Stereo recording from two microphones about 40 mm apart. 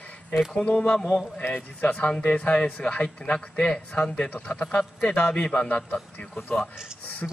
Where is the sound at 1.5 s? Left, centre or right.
Left.